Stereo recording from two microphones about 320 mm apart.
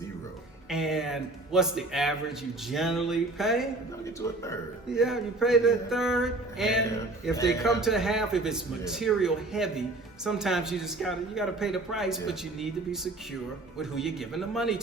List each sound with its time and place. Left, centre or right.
0.7 s speech: centre
4.9 s speech: centre